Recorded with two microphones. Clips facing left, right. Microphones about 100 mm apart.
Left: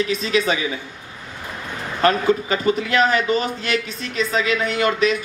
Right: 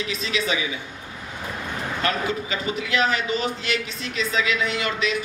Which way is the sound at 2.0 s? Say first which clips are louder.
Left 9 dB; 45° left (ahead or behind).